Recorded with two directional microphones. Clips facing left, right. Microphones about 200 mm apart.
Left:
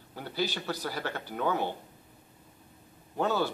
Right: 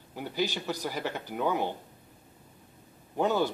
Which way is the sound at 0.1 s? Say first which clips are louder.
Right 2 dB; 15° right (ahead or behind).